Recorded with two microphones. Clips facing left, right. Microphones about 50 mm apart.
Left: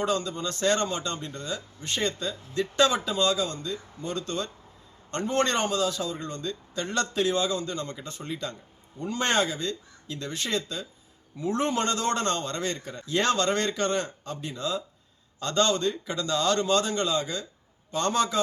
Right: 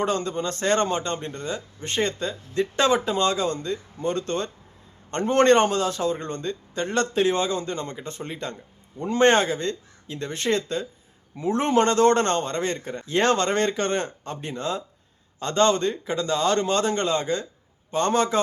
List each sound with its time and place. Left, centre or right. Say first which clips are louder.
0.0 s a man's voice: right 3 dB; right
15.4 s a man's voice: right 4 dB; right